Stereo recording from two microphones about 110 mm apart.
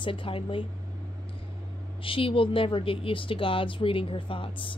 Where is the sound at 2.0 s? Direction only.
55° left (ahead or behind).